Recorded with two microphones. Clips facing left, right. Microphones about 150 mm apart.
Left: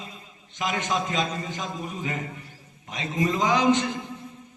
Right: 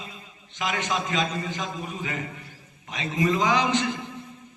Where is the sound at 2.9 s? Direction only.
45° left (ahead or behind).